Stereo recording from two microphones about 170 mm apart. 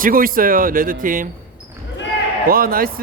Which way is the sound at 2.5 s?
60° right (ahead or behind).